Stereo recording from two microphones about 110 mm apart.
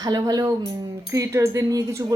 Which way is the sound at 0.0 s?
35° right (ahead or behind).